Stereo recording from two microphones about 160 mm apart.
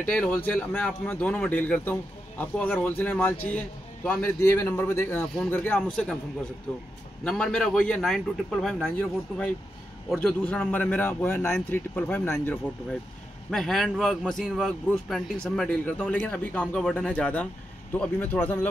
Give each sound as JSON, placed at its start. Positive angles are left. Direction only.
{"t": 0.1, "sound": "a man's voice", "side_deg": 10}
{"t": 7.2, "sound": "a man's voice", "side_deg": 5}
{"t": 10.0, "sound": "a man's voice", "side_deg": 5}
{"t": 13.5, "sound": "a man's voice", "side_deg": 0}